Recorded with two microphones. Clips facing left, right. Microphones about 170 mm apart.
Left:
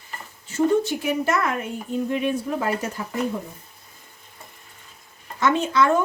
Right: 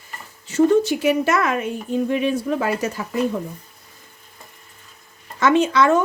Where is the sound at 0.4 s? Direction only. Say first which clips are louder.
Right 4 dB; 90° right.